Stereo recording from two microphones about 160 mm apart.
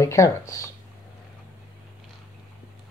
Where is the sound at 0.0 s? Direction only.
20° left (ahead or behind).